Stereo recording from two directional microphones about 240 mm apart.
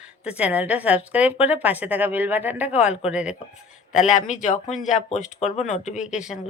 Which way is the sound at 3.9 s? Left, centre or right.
Left.